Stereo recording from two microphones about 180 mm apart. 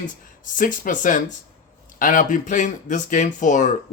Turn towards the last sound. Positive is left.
turn(degrees=45)  # may be behind; listen again after turning